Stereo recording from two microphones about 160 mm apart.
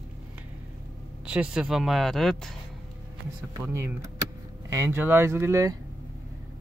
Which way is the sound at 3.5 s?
15° right (ahead or behind).